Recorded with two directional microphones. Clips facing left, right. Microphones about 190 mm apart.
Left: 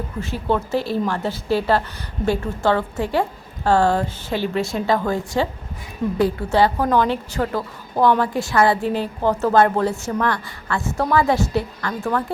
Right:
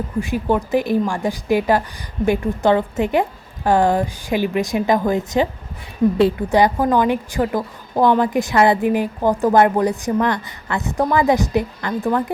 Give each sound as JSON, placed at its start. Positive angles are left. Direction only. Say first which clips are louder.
{"t": 0.2, "sound": "a woman's voice", "louder": "right 3 dB", "side_deg": -15}